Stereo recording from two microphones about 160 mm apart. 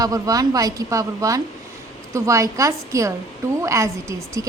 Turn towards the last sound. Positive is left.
turn(degrees=-20)  # may be behind; listen again after turning